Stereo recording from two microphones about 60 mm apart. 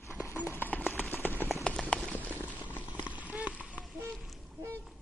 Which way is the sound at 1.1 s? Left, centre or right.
Left.